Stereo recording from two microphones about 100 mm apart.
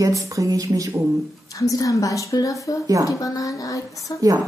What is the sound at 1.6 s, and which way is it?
A woman's voice, 35° left (ahead or behind).